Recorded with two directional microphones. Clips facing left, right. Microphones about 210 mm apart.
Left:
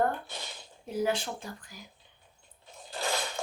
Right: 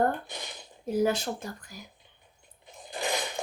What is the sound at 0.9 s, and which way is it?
Speech, 40° right (ahead or behind).